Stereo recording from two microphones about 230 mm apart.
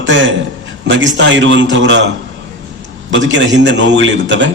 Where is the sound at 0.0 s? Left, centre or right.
Right.